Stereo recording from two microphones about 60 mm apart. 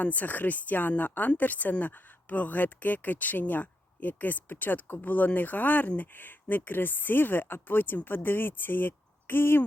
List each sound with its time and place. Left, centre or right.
0.0 s speech: left